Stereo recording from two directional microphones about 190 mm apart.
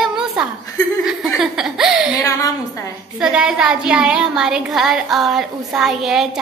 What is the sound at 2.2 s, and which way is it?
Speech, 15° left (ahead or behind).